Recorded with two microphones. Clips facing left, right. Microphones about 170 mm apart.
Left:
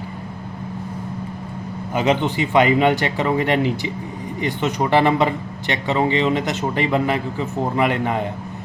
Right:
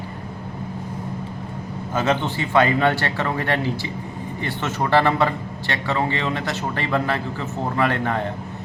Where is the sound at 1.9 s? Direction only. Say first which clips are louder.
Left 3 dB; 15° left (ahead or behind).